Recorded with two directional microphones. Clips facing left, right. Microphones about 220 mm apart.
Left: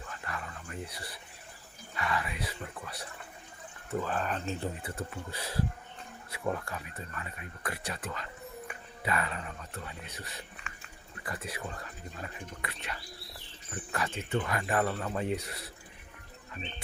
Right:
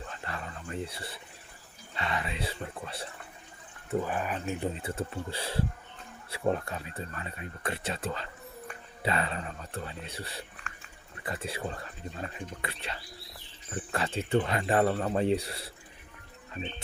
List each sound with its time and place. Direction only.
0.1 s a sound: 30° right (ahead or behind)
2.0 s speech: 25° right (ahead or behind)
3.8 s speech: 15° right (ahead or behind)
4.8 s speech: 25° right (ahead or behind)